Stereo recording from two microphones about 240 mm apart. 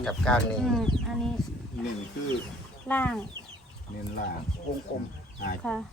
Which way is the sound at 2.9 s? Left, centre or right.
Centre.